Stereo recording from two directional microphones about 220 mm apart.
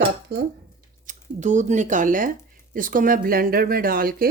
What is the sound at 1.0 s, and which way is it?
Speech, 35° right (ahead or behind).